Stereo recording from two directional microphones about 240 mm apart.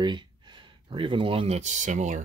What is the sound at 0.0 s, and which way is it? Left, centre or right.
Speech, centre.